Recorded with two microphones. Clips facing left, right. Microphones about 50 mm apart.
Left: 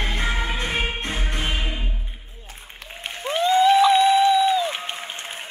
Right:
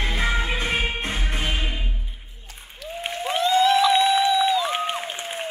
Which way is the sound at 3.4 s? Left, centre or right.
Centre.